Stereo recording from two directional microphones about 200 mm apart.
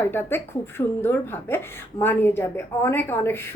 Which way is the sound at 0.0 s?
10° left (ahead or behind).